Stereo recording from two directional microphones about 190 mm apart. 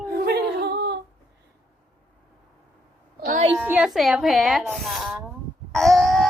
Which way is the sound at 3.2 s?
45° right (ahead or behind).